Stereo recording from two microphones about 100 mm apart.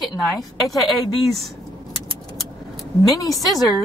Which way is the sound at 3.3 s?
Centre (ahead or behind).